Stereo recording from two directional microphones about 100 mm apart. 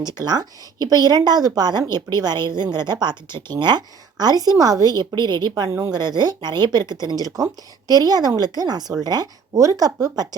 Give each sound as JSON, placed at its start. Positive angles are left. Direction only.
{"t": 0.0, "sound": "a woman's voice", "side_deg": -40}